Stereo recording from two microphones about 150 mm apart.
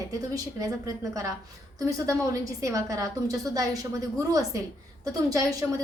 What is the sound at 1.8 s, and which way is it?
A woman's voice, 20° right (ahead or behind).